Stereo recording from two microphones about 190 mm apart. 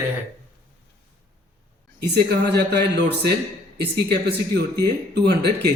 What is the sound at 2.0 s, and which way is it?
Speech, 60° right (ahead or behind).